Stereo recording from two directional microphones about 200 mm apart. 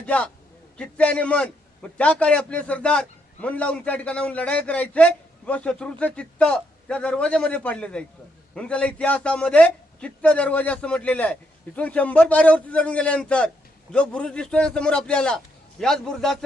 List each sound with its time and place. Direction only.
0.0 s a man's voice: 5° left (ahead or behind)